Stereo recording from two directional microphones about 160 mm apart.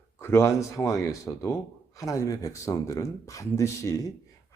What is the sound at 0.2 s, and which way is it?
Speech, 15° left (ahead or behind).